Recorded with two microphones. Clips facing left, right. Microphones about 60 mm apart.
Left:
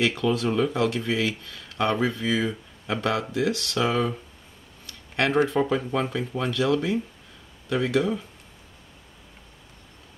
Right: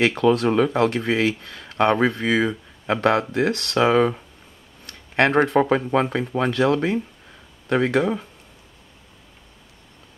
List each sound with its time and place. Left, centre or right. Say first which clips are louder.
0.0 s speech: right 6 dB; right
4.8 s a sound: right 6 dB; right
5.9 s speech: right 5 dB; right